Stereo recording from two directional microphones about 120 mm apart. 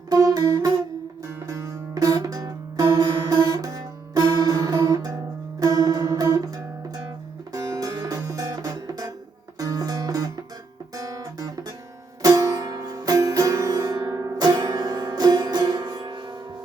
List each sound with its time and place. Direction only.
0.1 s music: 30° right (ahead or behind)
10.9 s guitar: 30° right (ahead or behind)
12.2 s music: 30° right (ahead or behind)